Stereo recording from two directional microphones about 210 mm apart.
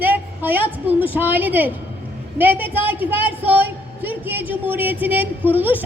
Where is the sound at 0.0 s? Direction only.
10° right (ahead or behind).